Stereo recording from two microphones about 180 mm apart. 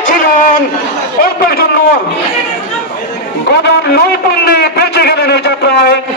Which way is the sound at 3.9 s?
65° left (ahead or behind).